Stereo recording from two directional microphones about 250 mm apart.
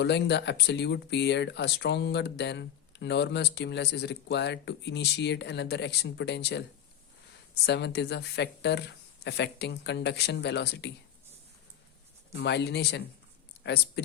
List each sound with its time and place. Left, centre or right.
0.0 s speech: left
12.3 s speech: left